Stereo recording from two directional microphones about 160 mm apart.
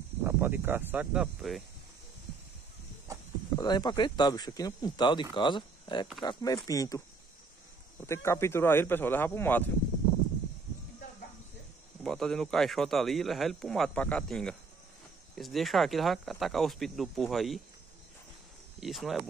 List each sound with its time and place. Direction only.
0.2 s speech: 15° right (ahead or behind)
3.5 s speech: 25° left (ahead or behind)
8.1 s speech: 15° left (ahead or behind)
12.0 s speech: centre (ahead or behind)
18.8 s speech: centre (ahead or behind)